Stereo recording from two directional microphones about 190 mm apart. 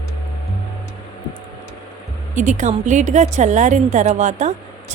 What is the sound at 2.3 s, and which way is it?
A woman's voice, 40° right (ahead or behind).